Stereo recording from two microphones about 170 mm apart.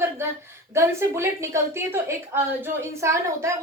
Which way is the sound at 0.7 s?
15° right (ahead or behind).